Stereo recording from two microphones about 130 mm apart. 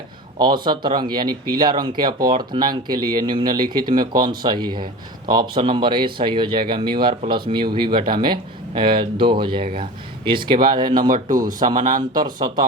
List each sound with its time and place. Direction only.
0.3 s speech: 35° right (ahead or behind)
11.6 s speech: 75° right (ahead or behind)
12.1 s speech: 35° right (ahead or behind)